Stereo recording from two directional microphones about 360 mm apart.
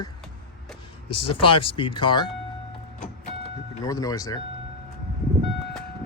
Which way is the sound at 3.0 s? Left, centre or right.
Centre.